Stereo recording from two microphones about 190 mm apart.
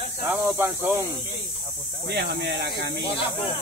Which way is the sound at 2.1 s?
60° right (ahead or behind).